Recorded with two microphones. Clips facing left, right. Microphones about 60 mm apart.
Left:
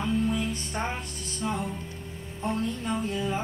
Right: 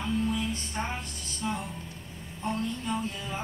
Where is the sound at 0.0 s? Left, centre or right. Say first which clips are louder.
Left 2 dB; centre.